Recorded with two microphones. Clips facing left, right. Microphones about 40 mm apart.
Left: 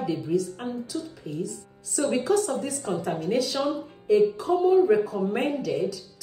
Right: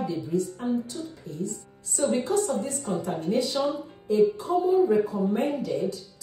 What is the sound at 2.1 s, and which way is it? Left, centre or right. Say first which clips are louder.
Speech: left 3 dB; left.